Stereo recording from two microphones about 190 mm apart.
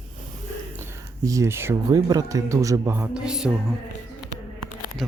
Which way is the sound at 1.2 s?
15° right (ahead or behind).